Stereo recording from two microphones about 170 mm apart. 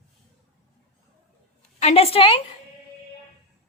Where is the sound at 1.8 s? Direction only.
40° left (ahead or behind).